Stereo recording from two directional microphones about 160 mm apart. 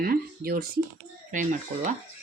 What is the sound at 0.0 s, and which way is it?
Speech, 65° right (ahead or behind).